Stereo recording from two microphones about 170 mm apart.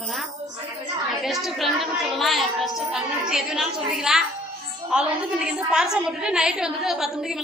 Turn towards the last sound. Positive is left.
turn(degrees=0)  # may be behind; listen again after turning